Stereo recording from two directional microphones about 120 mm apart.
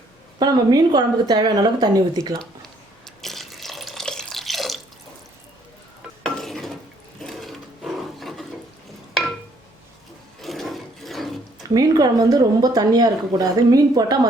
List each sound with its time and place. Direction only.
0.3 s speech: 35° right (ahead or behind)
3.2 s water: centre (ahead or behind)
6.2 s stir: 5° left (ahead or behind)
7.2 s sewing machine: centre (ahead or behind)
8.2 s a sound: centre (ahead or behind)
10.4 s a sound: centre (ahead or behind)
11.7 s speech: 30° right (ahead or behind)